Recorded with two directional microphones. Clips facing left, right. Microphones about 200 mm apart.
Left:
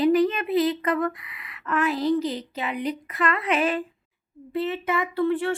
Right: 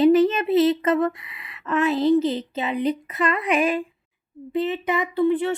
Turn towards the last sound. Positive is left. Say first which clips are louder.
# right 3 dB
turn(degrees=-20)  # may be behind; listen again after turning